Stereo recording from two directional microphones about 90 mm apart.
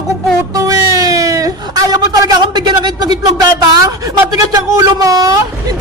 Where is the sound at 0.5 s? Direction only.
40° right (ahead or behind).